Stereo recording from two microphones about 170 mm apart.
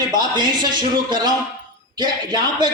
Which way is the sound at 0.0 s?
25° right (ahead or behind).